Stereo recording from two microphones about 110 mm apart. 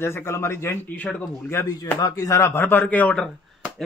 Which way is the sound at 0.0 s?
25° left (ahead or behind).